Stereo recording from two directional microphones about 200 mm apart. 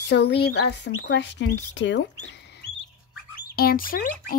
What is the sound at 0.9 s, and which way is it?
Speech, 75° left (ahead or behind).